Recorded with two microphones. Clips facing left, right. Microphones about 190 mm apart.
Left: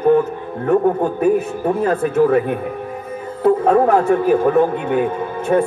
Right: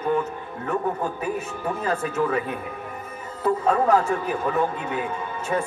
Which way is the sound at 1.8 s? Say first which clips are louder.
Left 9 dB; 60° left (ahead or behind).